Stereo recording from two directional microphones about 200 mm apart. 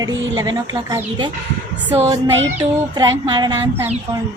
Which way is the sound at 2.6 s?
20° right (ahead or behind).